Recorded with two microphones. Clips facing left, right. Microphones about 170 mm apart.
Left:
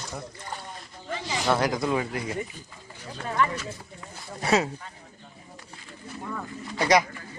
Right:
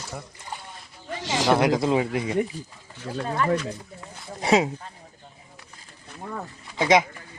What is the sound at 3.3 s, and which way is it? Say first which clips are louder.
Speech: right 1 dB; 40° right (ahead or behind).